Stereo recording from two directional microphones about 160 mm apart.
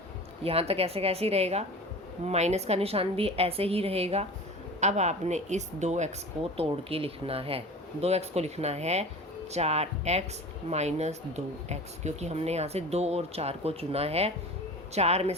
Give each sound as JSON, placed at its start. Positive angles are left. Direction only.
{"t": 0.4, "sound": "speech", "side_deg": -40}